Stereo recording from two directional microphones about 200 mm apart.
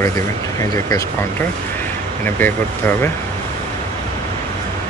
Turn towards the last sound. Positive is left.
turn(degrees=10)  # may be behind; listen again after turning